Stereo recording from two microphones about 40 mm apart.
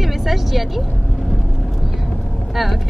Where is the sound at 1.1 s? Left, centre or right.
Centre.